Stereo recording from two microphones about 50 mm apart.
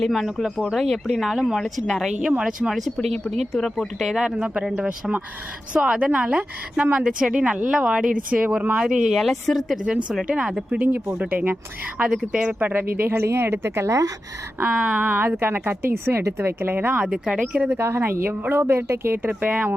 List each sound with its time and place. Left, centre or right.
0.0 s speech: centre
4.1 s speech: centre
8.3 s speech: right
8.8 s speech: centre
9.1 s speech: centre
9.8 s speech: right
11.9 s speech: right
12.5 s speech: right
14.7 s speech: right
15.4 s speech: right
15.9 s speech: right
17.0 s speech: centre
17.7 s speech: right
19.3 s speech: right